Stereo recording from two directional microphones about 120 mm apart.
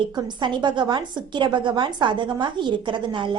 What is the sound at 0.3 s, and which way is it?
A woman's voice, 40° right (ahead or behind).